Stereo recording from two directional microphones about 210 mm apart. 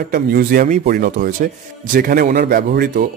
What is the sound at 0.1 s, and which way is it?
Speech, 45° right (ahead or behind).